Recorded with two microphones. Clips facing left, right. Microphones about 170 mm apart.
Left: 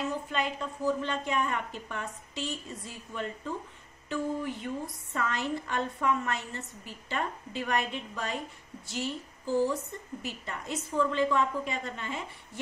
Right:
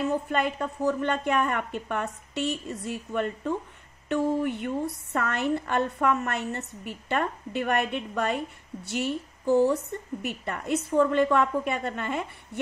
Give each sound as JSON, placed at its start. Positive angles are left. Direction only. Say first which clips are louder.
{"t": 0.3, "sound": "a woman's voice", "louder": "right 5 dB", "side_deg": -55}